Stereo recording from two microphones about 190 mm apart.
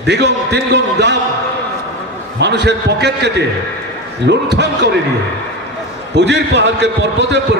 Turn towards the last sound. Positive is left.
turn(degrees=-65)  # may be behind; listen again after turning